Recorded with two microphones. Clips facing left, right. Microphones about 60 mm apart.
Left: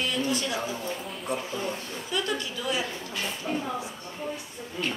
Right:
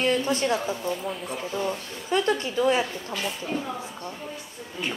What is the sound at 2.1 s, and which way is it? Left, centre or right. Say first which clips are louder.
Speech: right 6 dB; right.